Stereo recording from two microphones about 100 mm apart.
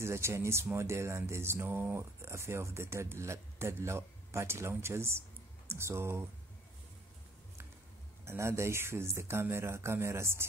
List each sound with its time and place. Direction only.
0.0 s speech: 25° right (ahead or behind)
8.3 s speech: 25° right (ahead or behind)